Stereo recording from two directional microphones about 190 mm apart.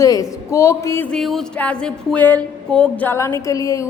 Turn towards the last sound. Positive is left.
turn(degrees=15)  # may be behind; listen again after turning